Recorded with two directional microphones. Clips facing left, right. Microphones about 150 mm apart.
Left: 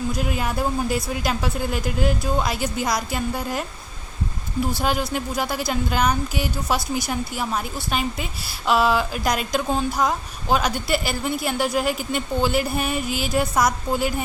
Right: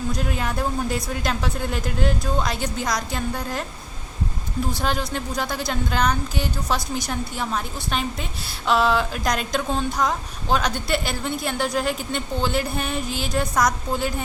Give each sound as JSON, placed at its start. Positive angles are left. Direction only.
{"t": 0.1, "sound": "speech", "side_deg": 5}
{"t": 4.7, "sound": "speech", "side_deg": 5}